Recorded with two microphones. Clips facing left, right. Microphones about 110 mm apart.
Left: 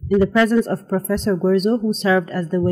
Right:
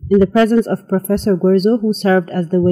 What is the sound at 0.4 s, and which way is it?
Speech, 45° right (ahead or behind).